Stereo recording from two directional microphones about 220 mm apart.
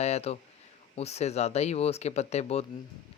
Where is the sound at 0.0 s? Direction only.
30° left (ahead or behind).